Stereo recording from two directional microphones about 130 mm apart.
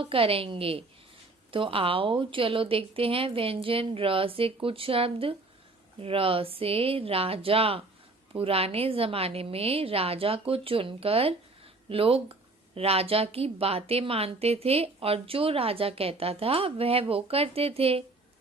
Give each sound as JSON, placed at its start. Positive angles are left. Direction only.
{"t": 0.0, "sound": "a woman's voice", "side_deg": -45}